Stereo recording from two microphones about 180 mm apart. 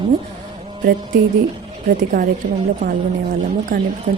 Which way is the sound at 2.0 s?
50° right (ahead or behind).